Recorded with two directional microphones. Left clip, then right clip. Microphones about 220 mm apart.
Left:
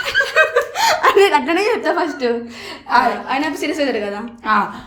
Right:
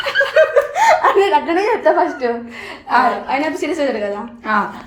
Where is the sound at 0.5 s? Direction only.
45° left (ahead or behind).